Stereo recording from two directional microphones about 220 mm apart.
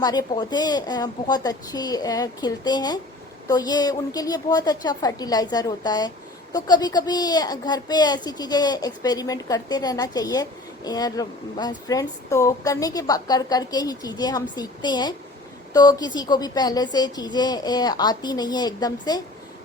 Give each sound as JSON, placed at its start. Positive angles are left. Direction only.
{"t": 0.0, "sound": "a woman's voice", "side_deg": 15}